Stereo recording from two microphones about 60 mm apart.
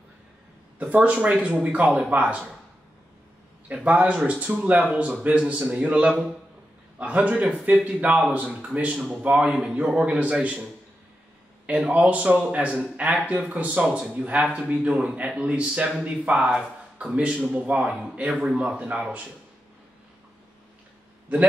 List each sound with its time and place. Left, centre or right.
0.7 s a man's voice: right
3.6 s a man's voice: right
9.5 s a man's voice: centre
9.8 s a man's voice: right
13.8 s a man's voice: centre
14.1 s a man's voice: right